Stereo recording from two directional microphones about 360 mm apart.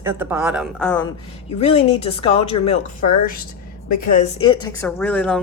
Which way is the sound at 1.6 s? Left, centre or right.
Centre.